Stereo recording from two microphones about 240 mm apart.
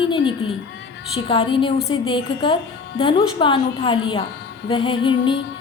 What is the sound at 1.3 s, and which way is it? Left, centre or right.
A woman's voice, left.